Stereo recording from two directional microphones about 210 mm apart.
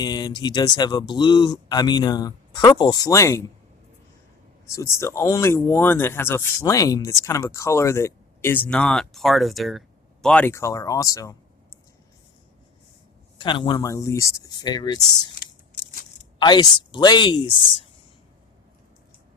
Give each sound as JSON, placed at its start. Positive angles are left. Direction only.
{"t": 0.0, "sound": "speech", "side_deg": 20}
{"t": 4.7, "sound": "speech", "side_deg": 15}
{"t": 13.4, "sound": "speech", "side_deg": 25}
{"t": 16.4, "sound": "speech", "side_deg": 20}